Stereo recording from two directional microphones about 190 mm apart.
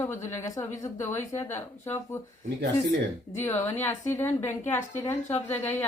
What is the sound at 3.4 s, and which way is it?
A woman's voice, 10° left (ahead or behind).